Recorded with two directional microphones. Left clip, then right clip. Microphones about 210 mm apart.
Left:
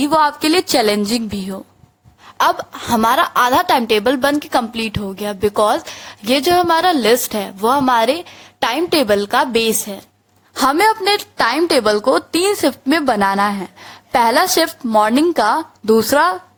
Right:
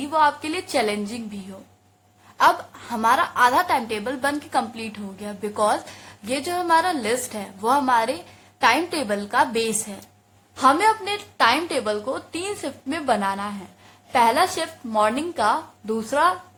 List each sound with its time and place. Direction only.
0.0 s a woman's voice: 45° left (ahead or behind)